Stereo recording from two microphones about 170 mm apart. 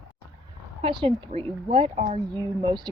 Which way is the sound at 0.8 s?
30° right (ahead or behind).